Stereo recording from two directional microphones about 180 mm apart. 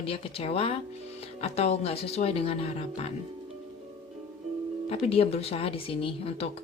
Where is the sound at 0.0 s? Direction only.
30° left (ahead or behind).